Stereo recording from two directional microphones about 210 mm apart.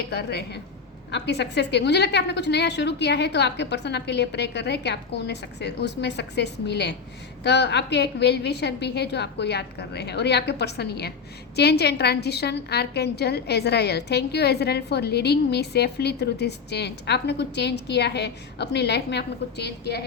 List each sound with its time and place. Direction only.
0.1 s a woman's voice: 50° left (ahead or behind)